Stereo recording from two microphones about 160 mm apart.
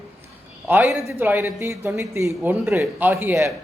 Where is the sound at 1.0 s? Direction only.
15° right (ahead or behind).